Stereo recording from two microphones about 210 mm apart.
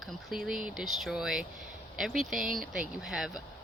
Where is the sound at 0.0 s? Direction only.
Centre (ahead or behind).